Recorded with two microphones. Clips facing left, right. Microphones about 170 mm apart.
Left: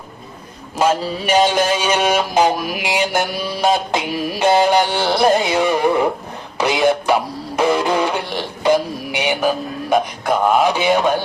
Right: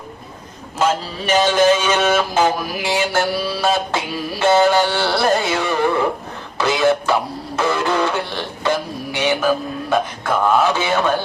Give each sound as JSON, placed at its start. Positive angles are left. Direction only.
{"t": 0.8, "sound": "a man's voice", "side_deg": 10}
{"t": 9.1, "sound": "a sound", "side_deg": 15}
{"t": 9.9, "sound": "a man's voice", "side_deg": 15}